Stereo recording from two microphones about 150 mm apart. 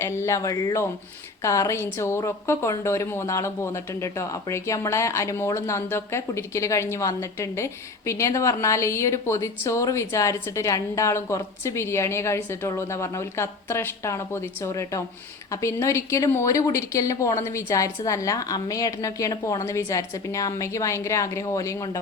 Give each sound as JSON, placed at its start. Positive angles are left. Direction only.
{"t": 0.0, "sound": "a woman's voice", "side_deg": 20}